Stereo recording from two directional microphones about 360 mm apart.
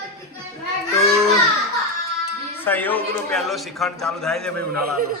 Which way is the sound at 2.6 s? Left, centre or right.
Centre.